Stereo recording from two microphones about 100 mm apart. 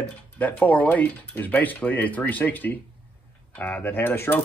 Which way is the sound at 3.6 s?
15° left (ahead or behind).